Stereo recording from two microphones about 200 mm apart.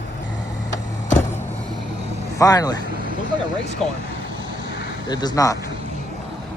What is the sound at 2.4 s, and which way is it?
Speech, 20° left (ahead or behind).